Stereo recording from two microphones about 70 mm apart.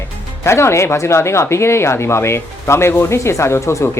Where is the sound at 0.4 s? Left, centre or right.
Left.